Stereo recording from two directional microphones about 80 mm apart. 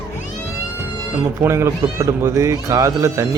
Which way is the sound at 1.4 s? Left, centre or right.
Right.